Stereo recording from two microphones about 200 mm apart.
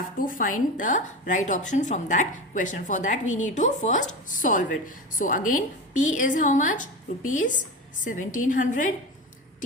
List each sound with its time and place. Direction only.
0.2 s a woman's voice: 45° left (ahead or behind)